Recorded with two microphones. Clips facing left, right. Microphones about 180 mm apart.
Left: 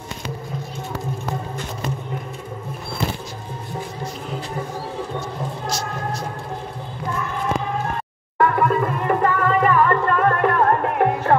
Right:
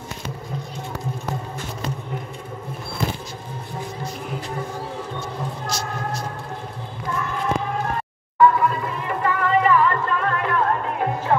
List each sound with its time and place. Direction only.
8.4 s music: 60° left (ahead or behind)